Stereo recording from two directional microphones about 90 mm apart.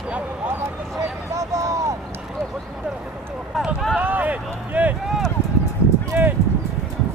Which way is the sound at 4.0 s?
15° right (ahead or behind).